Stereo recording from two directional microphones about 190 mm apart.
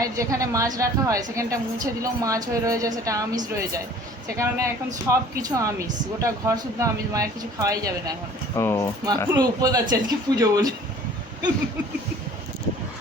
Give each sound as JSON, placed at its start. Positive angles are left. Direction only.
{"t": 0.0, "sound": "a woman's voice", "side_deg": -15}
{"t": 8.5, "sound": "speech", "side_deg": 15}
{"t": 9.0, "sound": "speech", "side_deg": -20}